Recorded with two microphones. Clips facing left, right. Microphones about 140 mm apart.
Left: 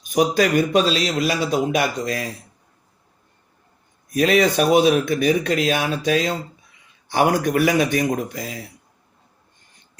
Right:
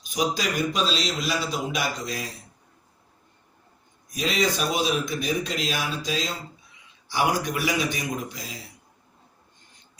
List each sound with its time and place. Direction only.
0.0 s speech: 55° left (ahead or behind)
4.1 s speech: 60° left (ahead or behind)